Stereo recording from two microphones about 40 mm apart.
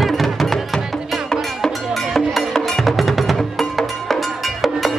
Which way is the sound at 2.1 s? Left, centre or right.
Centre.